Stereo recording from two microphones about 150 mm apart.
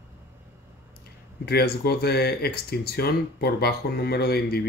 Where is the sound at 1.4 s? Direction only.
90° left.